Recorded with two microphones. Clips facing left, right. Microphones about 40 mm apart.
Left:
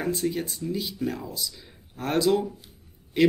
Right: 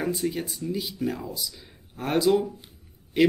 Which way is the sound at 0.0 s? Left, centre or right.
Centre.